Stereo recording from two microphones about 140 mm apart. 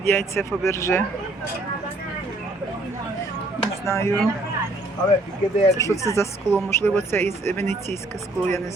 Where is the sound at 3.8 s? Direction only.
20° left (ahead or behind).